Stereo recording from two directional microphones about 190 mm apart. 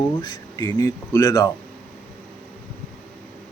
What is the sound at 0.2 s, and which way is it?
Speech, 25° left (ahead or behind).